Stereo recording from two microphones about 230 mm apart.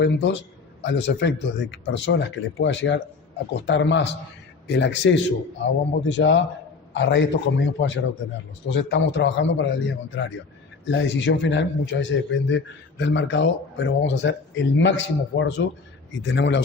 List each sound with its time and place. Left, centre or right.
0.0 s a man's voice: left
10.8 s a man's voice: left